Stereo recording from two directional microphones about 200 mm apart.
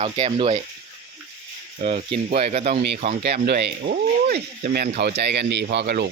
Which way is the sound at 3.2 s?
55° right (ahead or behind).